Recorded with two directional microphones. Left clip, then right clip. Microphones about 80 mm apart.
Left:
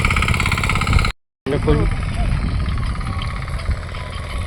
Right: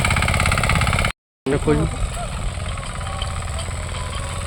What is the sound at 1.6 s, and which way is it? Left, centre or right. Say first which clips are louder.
Speech: left 1 dB; right.